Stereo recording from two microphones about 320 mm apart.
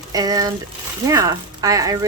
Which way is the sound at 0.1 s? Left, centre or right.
Centre.